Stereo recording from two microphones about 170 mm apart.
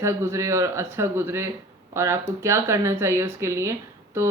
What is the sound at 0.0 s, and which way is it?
A woman's voice, 15° right (ahead or behind).